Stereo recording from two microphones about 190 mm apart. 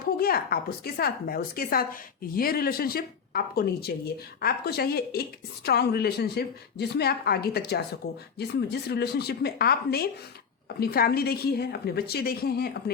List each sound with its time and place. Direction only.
0.2 s a woman's voice: 50° left (ahead or behind)